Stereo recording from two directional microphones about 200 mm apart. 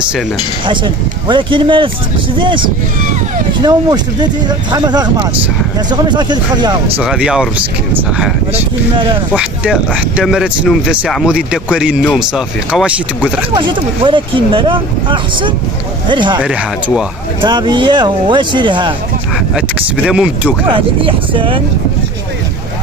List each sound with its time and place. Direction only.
0.7 s speech: 25° right (ahead or behind)
7.0 s speech: 5° right (ahead or behind)
8.5 s speech: 25° right (ahead or behind)
9.3 s speech: 5° right (ahead or behind)
13.6 s speech: 25° right (ahead or behind)
16.3 s speech: 5° right (ahead or behind)
17.4 s speech: 20° right (ahead or behind)
20.1 s speech: 5° right (ahead or behind)
20.6 s speech: 25° right (ahead or behind)